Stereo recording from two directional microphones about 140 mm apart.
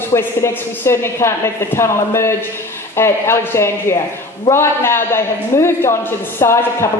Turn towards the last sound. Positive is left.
turn(degrees=20)  # may be behind; listen again after turning